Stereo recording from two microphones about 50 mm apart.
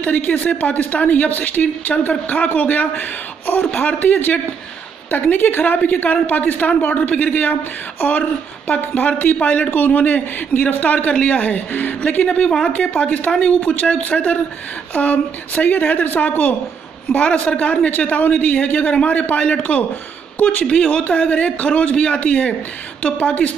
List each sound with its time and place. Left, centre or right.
0.0 s speech: left
12.3 s speech: left
20.6 s speech: centre